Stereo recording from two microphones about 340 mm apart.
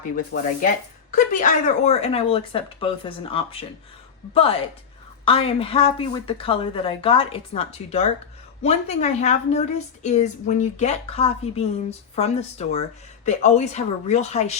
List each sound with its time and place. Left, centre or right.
0.3 s a woman's voice: left; by 3.7 s centre
5.2 s a woman's voice: centre